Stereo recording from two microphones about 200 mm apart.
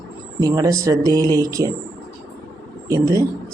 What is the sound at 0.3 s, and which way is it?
Speech, 15° right (ahead or behind).